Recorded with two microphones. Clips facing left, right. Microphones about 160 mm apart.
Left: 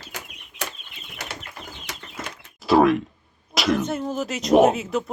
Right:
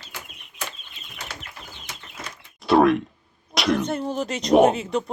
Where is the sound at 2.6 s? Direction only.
Centre (ahead or behind).